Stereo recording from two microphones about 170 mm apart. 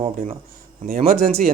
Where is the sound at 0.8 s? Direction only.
60° right (ahead or behind).